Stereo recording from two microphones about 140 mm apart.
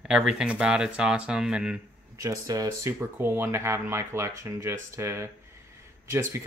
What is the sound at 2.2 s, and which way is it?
Speech, 25° right (ahead or behind).